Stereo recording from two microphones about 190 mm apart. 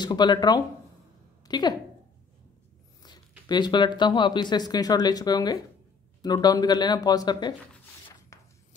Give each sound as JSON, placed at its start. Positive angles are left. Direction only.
{"t": 0.0, "sound": "speech", "side_deg": 25}
{"t": 3.0, "sound": "speech", "side_deg": 20}
{"t": 8.3, "sound": "a sound", "side_deg": 15}